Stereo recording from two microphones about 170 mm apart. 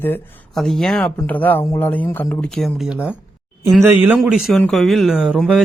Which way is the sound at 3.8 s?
10° right (ahead or behind).